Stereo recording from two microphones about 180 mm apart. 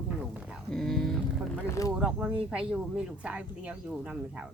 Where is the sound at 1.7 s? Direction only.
20° left (ahead or behind).